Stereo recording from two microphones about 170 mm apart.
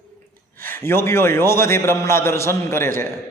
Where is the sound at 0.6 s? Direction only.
15° left (ahead or behind).